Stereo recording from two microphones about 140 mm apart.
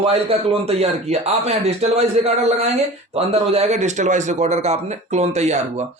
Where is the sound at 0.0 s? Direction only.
45° right (ahead or behind).